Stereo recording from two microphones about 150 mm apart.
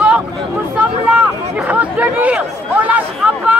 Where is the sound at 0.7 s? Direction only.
10° right (ahead or behind).